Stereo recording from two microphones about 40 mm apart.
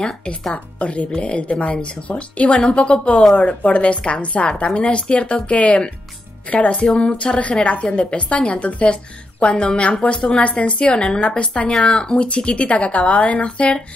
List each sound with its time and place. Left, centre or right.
0.7 s speech: left
7.6 s speech: left